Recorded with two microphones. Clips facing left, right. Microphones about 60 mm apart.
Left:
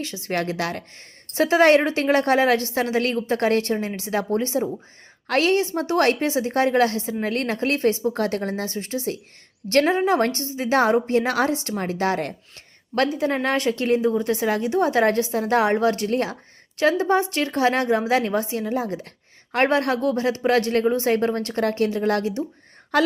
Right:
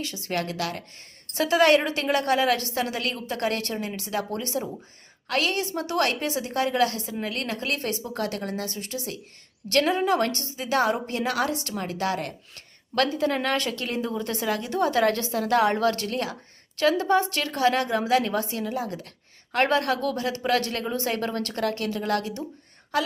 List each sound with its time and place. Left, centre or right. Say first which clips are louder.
0.0 s a woman's voice: left 3 dB; left
12.9 s a woman's voice: left 2 dB; centre
22.9 s speech: left 6 dB; left